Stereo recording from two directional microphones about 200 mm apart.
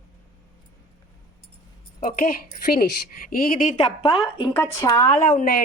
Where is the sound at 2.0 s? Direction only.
50° left (ahead or behind); by 4.5 s 30° left (ahead or behind).